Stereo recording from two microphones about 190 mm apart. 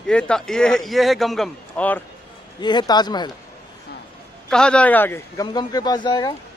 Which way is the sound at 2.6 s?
25° left (ahead or behind).